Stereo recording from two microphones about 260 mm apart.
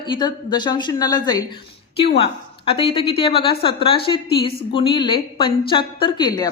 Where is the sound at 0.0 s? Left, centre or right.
Centre.